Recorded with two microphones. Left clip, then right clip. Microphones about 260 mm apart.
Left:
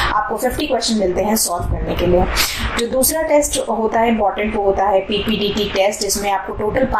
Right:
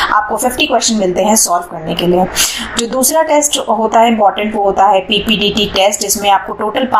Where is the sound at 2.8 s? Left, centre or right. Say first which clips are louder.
Right 6 dB; centre.